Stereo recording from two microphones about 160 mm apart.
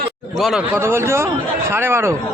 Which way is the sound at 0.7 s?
15° right (ahead or behind).